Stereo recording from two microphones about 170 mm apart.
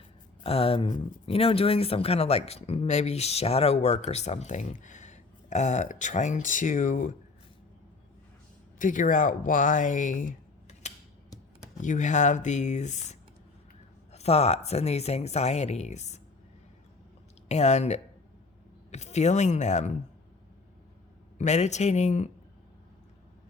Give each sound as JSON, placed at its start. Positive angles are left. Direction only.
{"t": 0.4, "sound": "speech", "side_deg": 35}
{"t": 8.8, "sound": "speech", "side_deg": 50}
{"t": 17.5, "sound": "speech", "side_deg": 40}
{"t": 21.3, "sound": "speech", "side_deg": 40}